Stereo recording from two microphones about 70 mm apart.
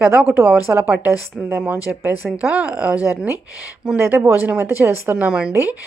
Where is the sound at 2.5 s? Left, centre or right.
Centre.